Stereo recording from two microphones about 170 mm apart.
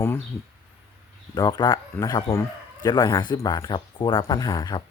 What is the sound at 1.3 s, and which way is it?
Speech, 25° left (ahead or behind).